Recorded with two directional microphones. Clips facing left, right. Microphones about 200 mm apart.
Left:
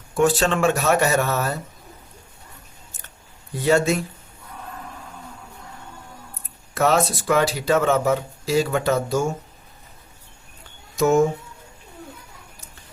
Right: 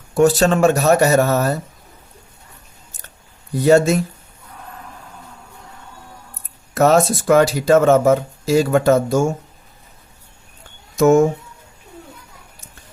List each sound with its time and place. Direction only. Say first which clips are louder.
0.1 s speech: right 5 dB; 40° right (ahead or behind)
3.6 s speech: right 6 dB; 40° right (ahead or behind)
6.7 s speech: right 6 dB; 45° right (ahead or behind)
10.9 s speech: right 6 dB; 50° right (ahead or behind)